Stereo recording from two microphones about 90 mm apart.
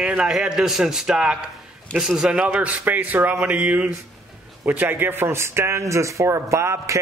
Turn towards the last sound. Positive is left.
turn(degrees=-35)  # may be behind; listen again after turning